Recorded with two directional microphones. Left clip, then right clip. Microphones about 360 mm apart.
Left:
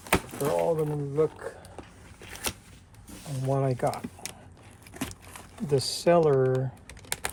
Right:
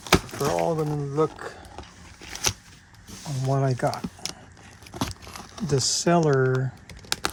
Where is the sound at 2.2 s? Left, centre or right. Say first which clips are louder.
Right 7 dB; right.